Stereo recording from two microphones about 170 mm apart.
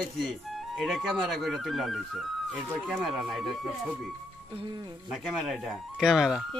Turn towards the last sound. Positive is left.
turn(degrees=0)  # may be behind; listen again after turning